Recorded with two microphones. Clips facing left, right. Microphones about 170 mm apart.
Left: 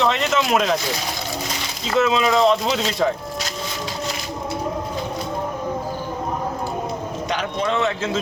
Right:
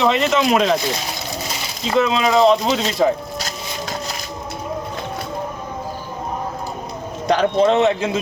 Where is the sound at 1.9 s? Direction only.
Centre (ahead or behind).